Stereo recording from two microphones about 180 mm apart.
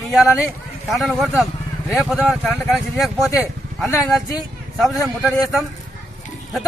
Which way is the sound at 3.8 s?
15° left (ahead or behind).